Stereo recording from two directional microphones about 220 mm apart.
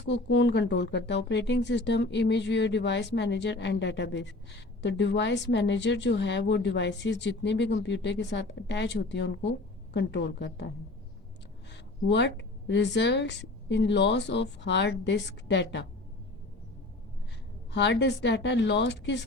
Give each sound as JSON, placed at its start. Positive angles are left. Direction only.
{"t": 0.1, "sound": "speech", "side_deg": 55}
{"t": 11.7, "sound": "speech", "side_deg": 50}
{"t": 17.7, "sound": "speech", "side_deg": 50}